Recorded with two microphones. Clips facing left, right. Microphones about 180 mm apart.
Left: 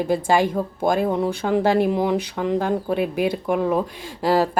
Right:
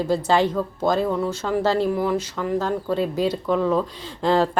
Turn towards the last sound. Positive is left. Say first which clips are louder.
# even
turn(degrees=10)  # may be behind; listen again after turning